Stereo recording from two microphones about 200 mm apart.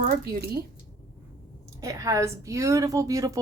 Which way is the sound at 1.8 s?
15° right (ahead or behind).